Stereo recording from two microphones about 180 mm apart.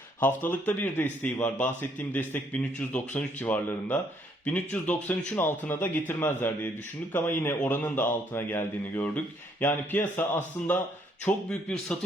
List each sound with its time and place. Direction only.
0.2 s speech: 10° left (ahead or behind)